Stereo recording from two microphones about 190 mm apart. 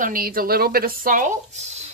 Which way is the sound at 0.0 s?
50° right (ahead or behind).